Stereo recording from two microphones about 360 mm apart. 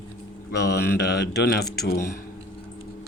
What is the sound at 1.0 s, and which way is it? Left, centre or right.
Speech, left.